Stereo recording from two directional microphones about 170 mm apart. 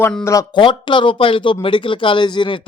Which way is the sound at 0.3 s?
25° left (ahead or behind).